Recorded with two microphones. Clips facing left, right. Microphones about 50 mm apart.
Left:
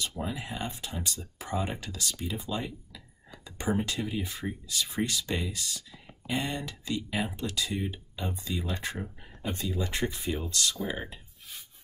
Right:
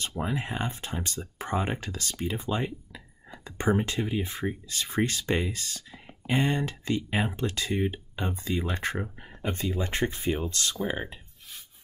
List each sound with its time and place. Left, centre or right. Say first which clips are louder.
0.2 s speech: right 7 dB; right